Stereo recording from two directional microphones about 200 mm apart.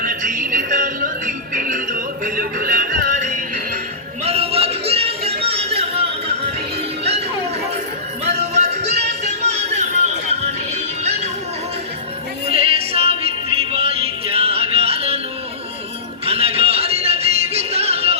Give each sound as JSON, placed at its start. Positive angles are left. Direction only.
{"t": 0.0, "sound": "music", "side_deg": -45}
{"t": 4.2, "sound": "music", "side_deg": -30}
{"t": 12.5, "sound": "music", "side_deg": -30}
{"t": 16.2, "sound": "music", "side_deg": -30}